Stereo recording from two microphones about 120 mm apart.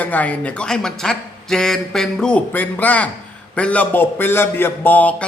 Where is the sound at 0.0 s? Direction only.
15° left (ahead or behind).